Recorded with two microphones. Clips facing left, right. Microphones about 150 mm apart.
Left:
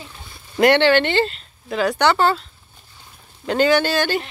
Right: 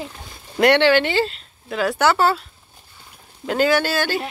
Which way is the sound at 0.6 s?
Centre (ahead or behind).